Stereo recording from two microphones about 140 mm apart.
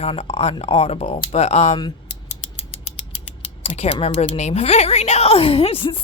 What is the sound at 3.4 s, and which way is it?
Speech, 50° left (ahead or behind).